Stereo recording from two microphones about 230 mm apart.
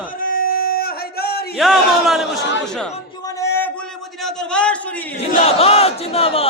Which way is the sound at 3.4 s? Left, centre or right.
Centre.